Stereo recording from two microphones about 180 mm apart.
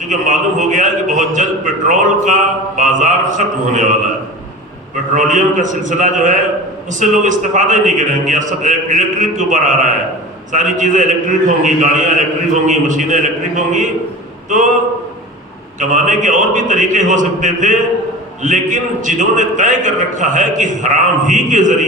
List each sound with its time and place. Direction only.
0.1 s a man's voice: 45° right (ahead or behind)
5.1 s a man's voice: 45° right (ahead or behind)
15.8 s a man's voice: 45° right (ahead or behind)